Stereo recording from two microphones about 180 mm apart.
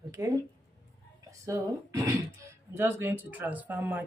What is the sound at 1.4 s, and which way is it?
Speech, 15° right (ahead or behind).